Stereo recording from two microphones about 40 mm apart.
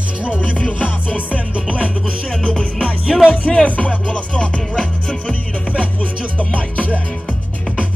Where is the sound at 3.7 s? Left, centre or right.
Left.